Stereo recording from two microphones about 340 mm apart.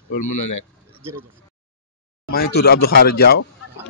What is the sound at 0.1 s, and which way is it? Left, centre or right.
Speech, left.